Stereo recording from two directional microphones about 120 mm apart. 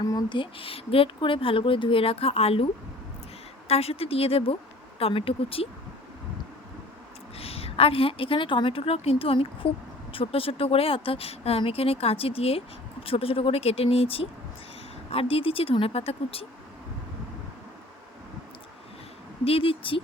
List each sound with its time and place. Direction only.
0.0 s speech: 30° left (ahead or behind)
0.3 s speech: 50° left (ahead or behind)
3.7 s speech: 55° left (ahead or behind)
7.3 s a woman's voice: 55° left (ahead or behind)
19.5 s speech: 50° left (ahead or behind)